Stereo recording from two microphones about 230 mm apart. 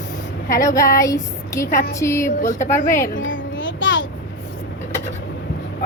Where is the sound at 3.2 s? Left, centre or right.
Left.